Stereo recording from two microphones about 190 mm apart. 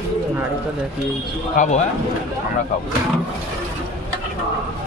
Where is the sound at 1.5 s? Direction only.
40° left (ahead or behind).